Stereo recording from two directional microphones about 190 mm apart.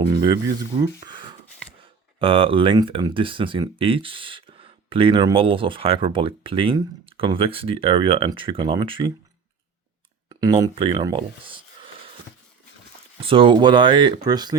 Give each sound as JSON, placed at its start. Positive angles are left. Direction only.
{"t": 0.0, "sound": "speech", "side_deg": -25}
{"t": 10.2, "sound": "speech", "side_deg": -20}
{"t": 13.2, "sound": "speech", "side_deg": -25}